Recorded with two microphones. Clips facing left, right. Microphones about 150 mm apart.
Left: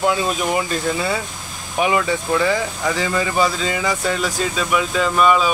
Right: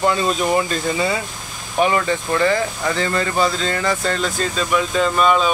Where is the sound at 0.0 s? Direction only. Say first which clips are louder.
Right 1 dB; 5° left (ahead or behind).